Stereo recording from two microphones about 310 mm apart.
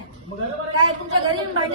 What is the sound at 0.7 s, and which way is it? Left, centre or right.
Speech, right.